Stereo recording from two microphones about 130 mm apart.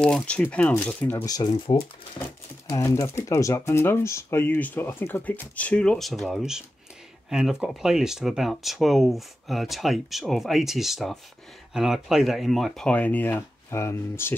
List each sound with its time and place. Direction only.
0.0 s speech: 10° left (ahead or behind)
1.1 s speech: 30° left (ahead or behind)